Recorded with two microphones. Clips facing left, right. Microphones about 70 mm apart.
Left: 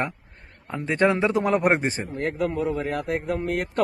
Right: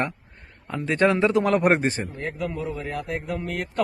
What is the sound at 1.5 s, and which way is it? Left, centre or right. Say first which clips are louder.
Speech: right 1 dB; centre.